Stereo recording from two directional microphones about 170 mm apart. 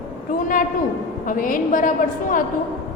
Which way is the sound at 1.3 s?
55° left (ahead or behind).